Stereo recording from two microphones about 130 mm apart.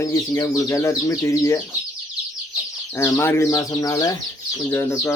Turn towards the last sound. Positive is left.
turn(degrees=20)  # may be behind; listen again after turning